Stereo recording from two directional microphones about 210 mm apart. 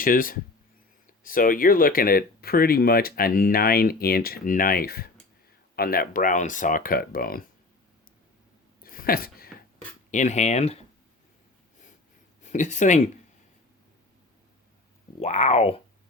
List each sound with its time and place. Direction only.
0.0 s speech: 40° left (ahead or behind)
8.8 s a sound: 45° left (ahead or behind)
10.1 s speech: 35° left (ahead or behind)
12.4 s speech: 35° left (ahead or behind)
15.2 s speech: 30° left (ahead or behind)